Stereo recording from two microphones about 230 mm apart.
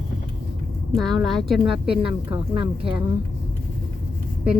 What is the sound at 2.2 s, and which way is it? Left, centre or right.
Speech, right.